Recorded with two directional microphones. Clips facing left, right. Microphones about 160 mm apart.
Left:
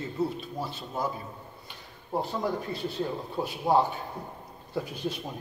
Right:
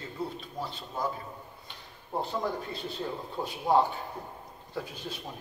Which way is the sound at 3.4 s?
20° left (ahead or behind).